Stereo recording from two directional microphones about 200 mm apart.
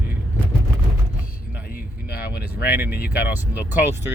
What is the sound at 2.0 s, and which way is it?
Speech, 55° left (ahead or behind).